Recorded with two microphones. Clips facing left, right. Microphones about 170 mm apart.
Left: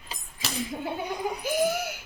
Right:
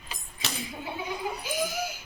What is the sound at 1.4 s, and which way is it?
Speech, 60° left (ahead or behind).